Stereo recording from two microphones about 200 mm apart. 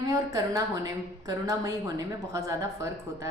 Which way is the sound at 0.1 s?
15° right (ahead or behind).